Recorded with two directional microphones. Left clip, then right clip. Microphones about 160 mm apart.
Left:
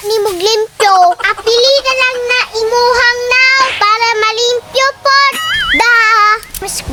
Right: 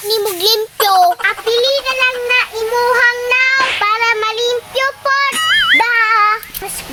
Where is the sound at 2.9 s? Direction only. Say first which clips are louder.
Left 2 dB; 25° left (ahead or behind).